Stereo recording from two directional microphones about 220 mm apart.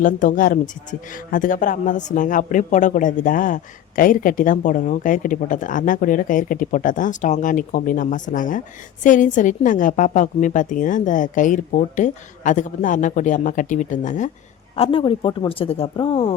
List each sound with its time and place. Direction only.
0.0 s a man's voice: 35° left (ahead or behind)
14.8 s speech: 25° left (ahead or behind)